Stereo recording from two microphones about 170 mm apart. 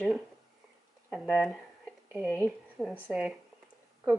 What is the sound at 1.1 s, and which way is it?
A woman's voice, centre (ahead or behind).